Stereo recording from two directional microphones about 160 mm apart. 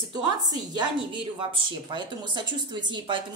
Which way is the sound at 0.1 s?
25° right (ahead or behind).